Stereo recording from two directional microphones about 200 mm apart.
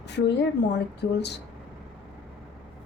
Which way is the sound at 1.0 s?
55° left (ahead or behind).